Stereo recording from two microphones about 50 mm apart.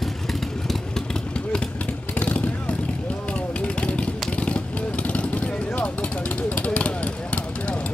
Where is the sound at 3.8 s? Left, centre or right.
Left.